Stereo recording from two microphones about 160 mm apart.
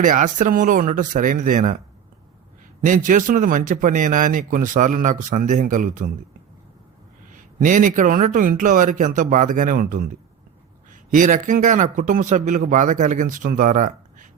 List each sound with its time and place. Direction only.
0.0 s speech: 55° right (ahead or behind)
2.8 s speech: 55° right (ahead or behind)
7.3 s speech: 55° right (ahead or behind)
11.1 s speech: 55° right (ahead or behind)